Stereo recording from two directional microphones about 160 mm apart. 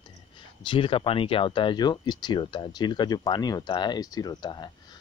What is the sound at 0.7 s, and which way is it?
Speech, 35° left (ahead or behind).